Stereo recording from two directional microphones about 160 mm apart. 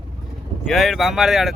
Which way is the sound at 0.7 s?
Centre (ahead or behind).